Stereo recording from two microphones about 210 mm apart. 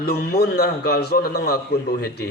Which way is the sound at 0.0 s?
50° left (ahead or behind).